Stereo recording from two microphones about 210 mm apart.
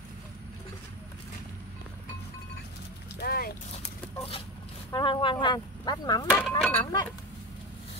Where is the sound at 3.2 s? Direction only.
45° left (ahead or behind).